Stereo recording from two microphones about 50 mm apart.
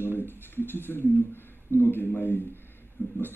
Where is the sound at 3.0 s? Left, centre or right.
Left.